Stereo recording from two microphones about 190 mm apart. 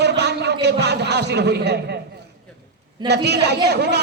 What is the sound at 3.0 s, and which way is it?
Speech, 60° right (ahead or behind).